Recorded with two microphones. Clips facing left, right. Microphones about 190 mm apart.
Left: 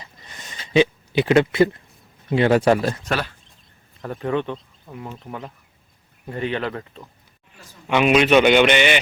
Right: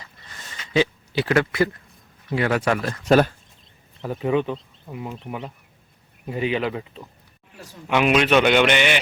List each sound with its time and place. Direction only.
0.0 s a sound: 20° left (ahead or behind)
0.7 s speech: 20° left (ahead or behind)
3.1 s speech: 45° right (ahead or behind)
4.0 s a man's voice: 5° right (ahead or behind)
6.2 s a man's voice: 10° right (ahead or behind)